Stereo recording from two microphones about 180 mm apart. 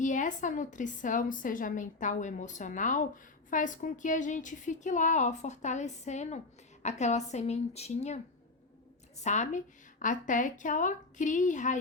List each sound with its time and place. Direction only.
0.0 s a woman's voice: 45° left (ahead or behind)
9.2 s a woman's voice: 40° left (ahead or behind)